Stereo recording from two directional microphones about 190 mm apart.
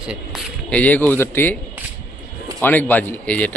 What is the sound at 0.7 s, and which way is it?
Speech, 10° left (ahead or behind).